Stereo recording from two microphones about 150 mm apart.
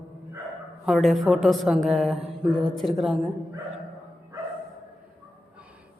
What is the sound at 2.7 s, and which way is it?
Speech, centre (ahead or behind).